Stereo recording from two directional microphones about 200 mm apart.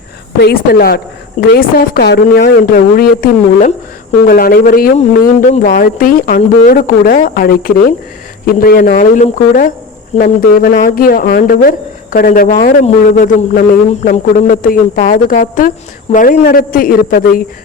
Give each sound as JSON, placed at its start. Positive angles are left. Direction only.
{"t": 0.4, "sound": "a woman's voice", "side_deg": 50}